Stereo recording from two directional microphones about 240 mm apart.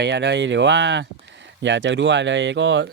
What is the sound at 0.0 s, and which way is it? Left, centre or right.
Speech, right.